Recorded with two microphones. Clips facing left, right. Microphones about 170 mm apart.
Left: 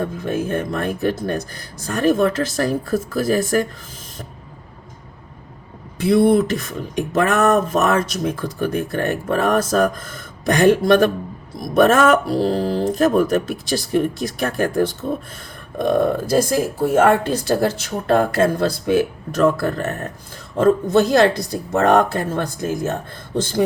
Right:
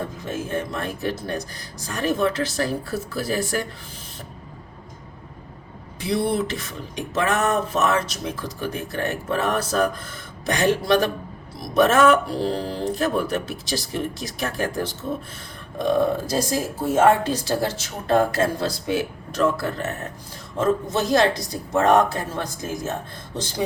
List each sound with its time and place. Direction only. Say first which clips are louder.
0.2 s speech: left 5 dB; 55° left (ahead or behind)
6.0 s speech: left 9 dB; 50° left (ahead or behind)